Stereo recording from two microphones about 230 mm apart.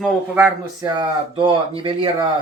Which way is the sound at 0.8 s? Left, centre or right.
Centre.